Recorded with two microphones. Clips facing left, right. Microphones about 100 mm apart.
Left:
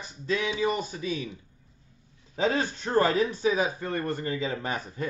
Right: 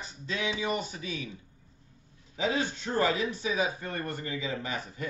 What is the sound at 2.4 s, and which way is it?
A man's voice, 45° left (ahead or behind).